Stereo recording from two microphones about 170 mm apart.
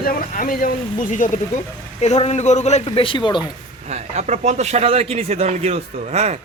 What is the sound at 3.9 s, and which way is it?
Speech, 45° right (ahead or behind).